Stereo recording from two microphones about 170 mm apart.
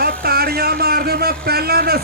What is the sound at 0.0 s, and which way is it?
A man's voice, 65° right (ahead or behind).